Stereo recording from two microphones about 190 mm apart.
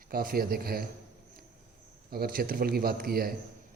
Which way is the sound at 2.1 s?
50° right (ahead or behind).